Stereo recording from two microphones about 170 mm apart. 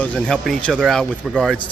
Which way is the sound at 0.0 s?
5° left (ahead or behind).